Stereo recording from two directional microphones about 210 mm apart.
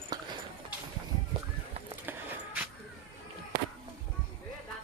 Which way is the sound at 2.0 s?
10° right (ahead or behind).